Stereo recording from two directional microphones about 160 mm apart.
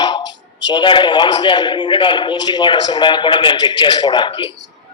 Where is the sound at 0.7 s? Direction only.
30° left (ahead or behind).